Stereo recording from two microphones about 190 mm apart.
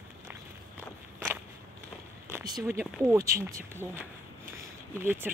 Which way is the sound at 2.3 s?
20° right (ahead or behind).